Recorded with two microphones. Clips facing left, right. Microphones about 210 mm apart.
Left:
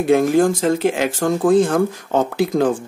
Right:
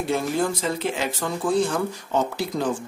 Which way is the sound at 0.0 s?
50° left (ahead or behind).